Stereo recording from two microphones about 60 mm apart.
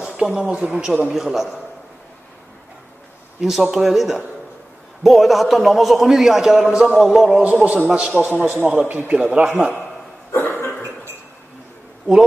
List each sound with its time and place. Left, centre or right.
0.0 s a man's voice: centre
3.3 s a man's voice: centre
7.4 s a man's voice: right
8.8 s a man's voice: right
10.3 s cough: left